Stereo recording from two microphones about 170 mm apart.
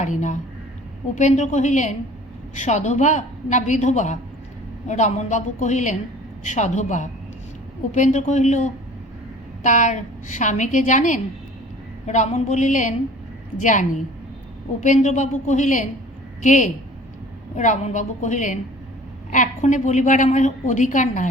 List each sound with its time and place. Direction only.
0.0 s a woman's voice: 45° left (ahead or behind)